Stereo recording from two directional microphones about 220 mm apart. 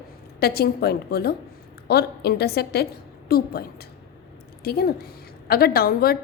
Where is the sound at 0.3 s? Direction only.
45° left (ahead or behind).